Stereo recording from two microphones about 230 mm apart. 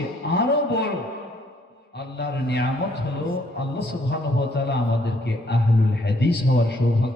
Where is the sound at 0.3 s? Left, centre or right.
Left.